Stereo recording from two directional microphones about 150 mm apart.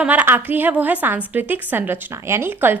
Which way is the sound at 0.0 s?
10° right (ahead or behind).